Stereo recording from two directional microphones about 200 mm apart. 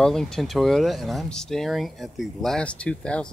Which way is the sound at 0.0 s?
5° left (ahead or behind).